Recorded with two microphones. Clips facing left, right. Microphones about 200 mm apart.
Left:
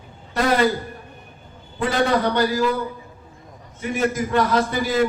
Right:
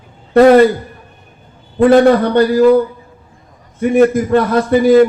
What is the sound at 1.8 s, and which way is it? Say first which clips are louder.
A man's voice: right 12 dB; 55° right (ahead or behind).